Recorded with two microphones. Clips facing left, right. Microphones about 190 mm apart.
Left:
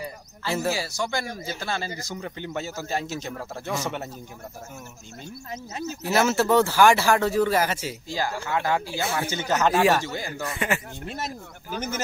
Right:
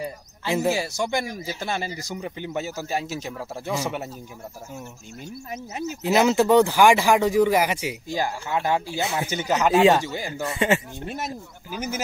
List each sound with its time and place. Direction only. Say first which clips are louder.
0.5 s speech: right 3 dB; 20° right (ahead or behind)
5.5 s speech: right 2 dB; 15° right (ahead or behind)
10.4 s speech: right 7 dB; 25° right (ahead or behind)